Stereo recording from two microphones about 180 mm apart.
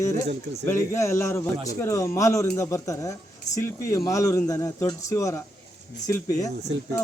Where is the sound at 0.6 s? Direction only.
15° left (ahead or behind).